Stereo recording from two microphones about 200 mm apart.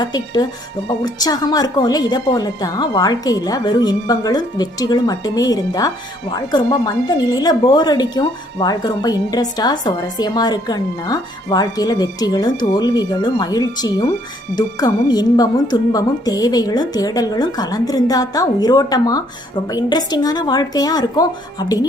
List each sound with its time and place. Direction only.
0.0 s a woman's voice: 20° left (ahead or behind)